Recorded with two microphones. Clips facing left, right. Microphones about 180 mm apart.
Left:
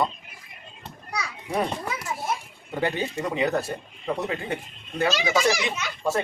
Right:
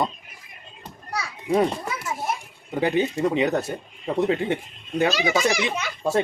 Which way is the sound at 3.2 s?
20° right (ahead or behind).